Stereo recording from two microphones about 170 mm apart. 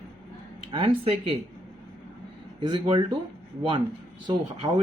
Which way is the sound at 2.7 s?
25° right (ahead or behind).